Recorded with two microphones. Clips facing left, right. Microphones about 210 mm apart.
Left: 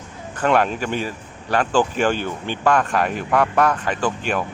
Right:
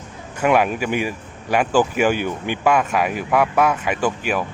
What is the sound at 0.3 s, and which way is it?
Speech, 10° right (ahead or behind).